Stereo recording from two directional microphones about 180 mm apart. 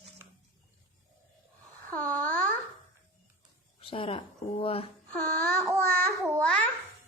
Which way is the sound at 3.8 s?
30° left (ahead or behind).